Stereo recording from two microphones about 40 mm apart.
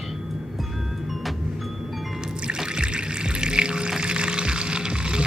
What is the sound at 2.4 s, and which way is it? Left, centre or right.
Music, centre.